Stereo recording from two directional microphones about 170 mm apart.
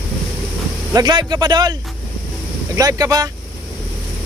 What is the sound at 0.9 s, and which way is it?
Speech, 25° right (ahead or behind).